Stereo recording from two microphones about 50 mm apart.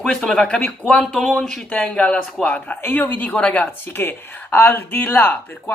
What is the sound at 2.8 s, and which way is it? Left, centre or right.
Speech, left.